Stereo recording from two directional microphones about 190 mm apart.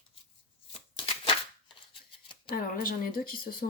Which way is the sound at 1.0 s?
25° left (ahead or behind).